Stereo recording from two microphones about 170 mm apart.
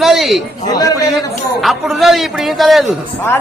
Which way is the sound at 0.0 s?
Centre (ahead or behind).